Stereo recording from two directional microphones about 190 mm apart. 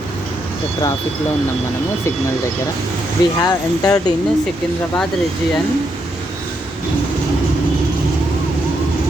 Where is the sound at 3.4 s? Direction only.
20° left (ahead or behind).